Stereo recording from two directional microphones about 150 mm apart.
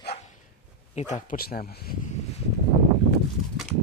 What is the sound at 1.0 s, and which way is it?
Speech, 50° left (ahead or behind).